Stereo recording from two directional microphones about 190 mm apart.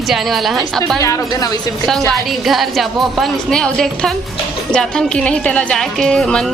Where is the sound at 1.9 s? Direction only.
Centre (ahead or behind).